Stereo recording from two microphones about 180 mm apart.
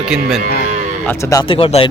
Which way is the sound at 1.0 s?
15° left (ahead or behind).